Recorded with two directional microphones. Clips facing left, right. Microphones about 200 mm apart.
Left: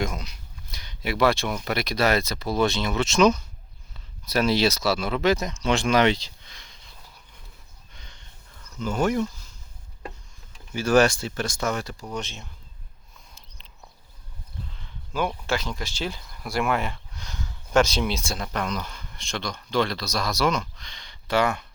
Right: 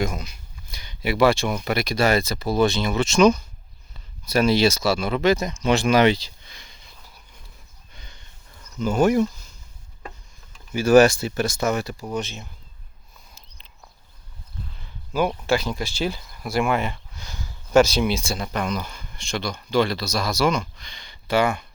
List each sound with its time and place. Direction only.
0.0 s speech: centre (ahead or behind)
7.9 s a sound: 5° right (ahead or behind)
8.8 s speech: 10° right (ahead or behind)
10.8 s speech: 5° right (ahead or behind)
15.3 s speech: 10° right (ahead or behind)